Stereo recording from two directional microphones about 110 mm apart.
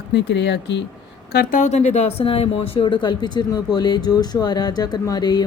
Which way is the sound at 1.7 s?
90° left.